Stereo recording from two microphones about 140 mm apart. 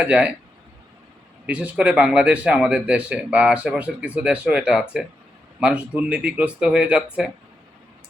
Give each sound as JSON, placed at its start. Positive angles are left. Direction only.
{"t": 0.0, "sound": "speech", "side_deg": -10}
{"t": 1.5, "sound": "speech", "side_deg": -10}